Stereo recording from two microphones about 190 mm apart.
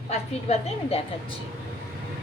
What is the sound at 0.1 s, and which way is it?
Speech, 35° left (ahead or behind).